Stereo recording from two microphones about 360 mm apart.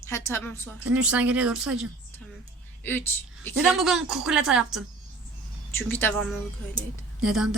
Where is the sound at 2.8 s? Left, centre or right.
Centre.